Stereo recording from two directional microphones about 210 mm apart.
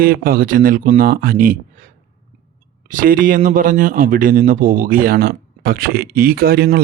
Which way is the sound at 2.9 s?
40° right (ahead or behind).